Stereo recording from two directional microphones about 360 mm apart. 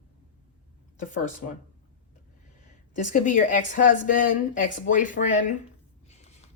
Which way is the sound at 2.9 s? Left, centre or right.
Left.